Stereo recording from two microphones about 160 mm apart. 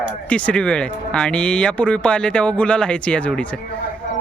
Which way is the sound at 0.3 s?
10° left (ahead or behind).